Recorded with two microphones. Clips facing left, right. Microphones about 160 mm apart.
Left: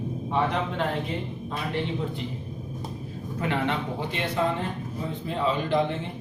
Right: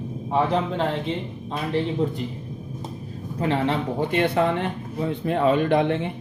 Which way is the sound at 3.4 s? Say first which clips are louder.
Right 4 dB; 35° right (ahead or behind).